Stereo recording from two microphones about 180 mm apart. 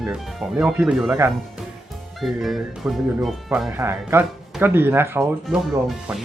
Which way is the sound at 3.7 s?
15° right (ahead or behind).